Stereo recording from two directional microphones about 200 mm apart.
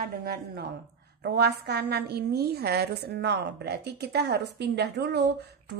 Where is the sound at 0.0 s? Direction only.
50° right (ahead or behind).